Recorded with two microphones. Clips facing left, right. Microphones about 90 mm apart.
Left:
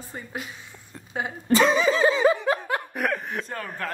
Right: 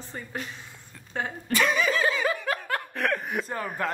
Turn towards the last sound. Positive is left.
turn(degrees=-10)  # may be behind; listen again after turning